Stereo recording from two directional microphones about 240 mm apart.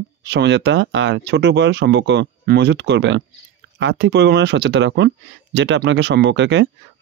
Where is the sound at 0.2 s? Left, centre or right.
Right.